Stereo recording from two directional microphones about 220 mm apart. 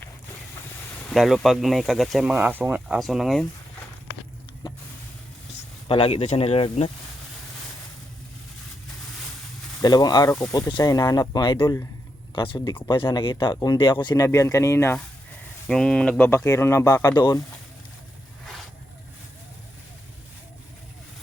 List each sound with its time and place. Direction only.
1.1 s speech: centre (ahead or behind)
4.6 s a sound: 20° left (ahead or behind)
5.9 s speech: 25° left (ahead or behind)
9.8 s speech: 20° left (ahead or behind)